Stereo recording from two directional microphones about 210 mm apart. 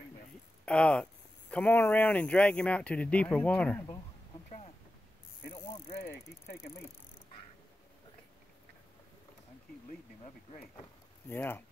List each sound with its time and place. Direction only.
0.7 s speech: 5° left (ahead or behind)
5.9 s speech: 45° left (ahead or behind)
11.2 s speech: 10° left (ahead or behind)